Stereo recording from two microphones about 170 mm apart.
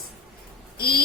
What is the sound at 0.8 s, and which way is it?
Speech, 65° left (ahead or behind).